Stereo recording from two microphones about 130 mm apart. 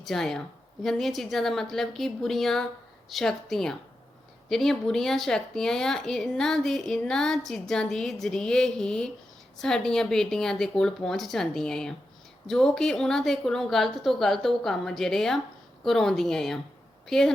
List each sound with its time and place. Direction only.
0.0 s speech: 5° left (ahead or behind)